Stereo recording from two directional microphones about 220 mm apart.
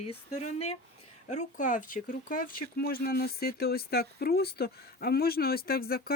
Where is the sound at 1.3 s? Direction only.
35° left (ahead or behind).